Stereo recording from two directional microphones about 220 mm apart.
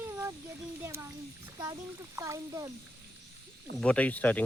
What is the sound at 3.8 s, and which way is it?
Speech, 5° left (ahead or behind).